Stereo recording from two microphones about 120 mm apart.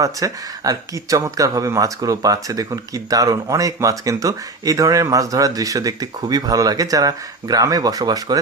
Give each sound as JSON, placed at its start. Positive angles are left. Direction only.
{"t": 0.0, "sound": "speech", "side_deg": -30}